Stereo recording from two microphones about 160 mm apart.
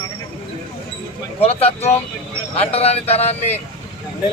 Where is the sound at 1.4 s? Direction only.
40° left (ahead or behind).